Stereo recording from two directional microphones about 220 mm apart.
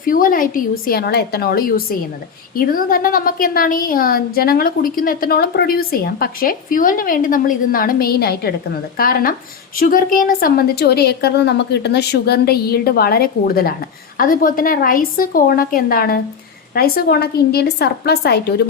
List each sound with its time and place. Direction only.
0.0 s a woman's voice: 40° left (ahead or behind)